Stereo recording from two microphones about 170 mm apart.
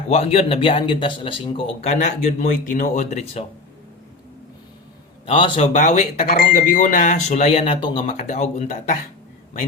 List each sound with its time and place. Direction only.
0.1 s a man's voice: 40° left (ahead or behind)
5.2 s a man's voice: 30° left (ahead or behind)
5.7 s speech: 40° left (ahead or behind)
6.2 s speech: 60° left (ahead or behind)